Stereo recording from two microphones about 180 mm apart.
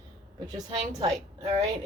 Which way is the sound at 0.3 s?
25° right (ahead or behind).